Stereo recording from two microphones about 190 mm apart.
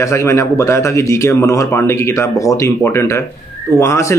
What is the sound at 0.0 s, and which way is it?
Speech, 15° left (ahead or behind).